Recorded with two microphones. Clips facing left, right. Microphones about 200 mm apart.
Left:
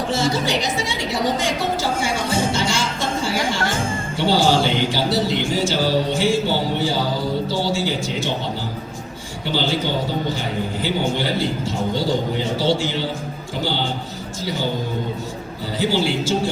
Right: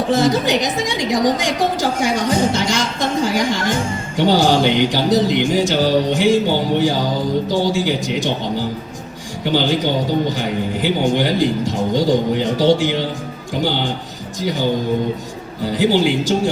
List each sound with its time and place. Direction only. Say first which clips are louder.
0.2 s a woman's voice: right 5 dB; 15° right (ahead or behind)
9.4 s a woman's voice: right 5 dB; 15° right (ahead or behind)
15.7 s a woman's voice: right 5 dB; 15° right (ahead or behind)